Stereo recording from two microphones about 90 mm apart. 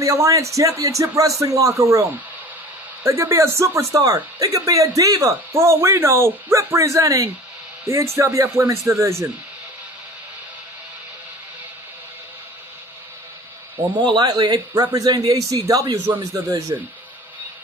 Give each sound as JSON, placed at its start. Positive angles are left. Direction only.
{"t": 0.0, "sound": "speech", "side_deg": -35}
{"t": 13.9, "sound": "a man's voice", "side_deg": -55}